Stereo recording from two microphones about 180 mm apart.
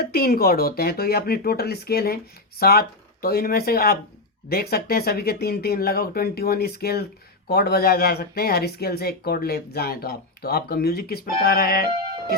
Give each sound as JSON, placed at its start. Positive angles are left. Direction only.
{"t": 0.0, "sound": "speech", "side_deg": 55}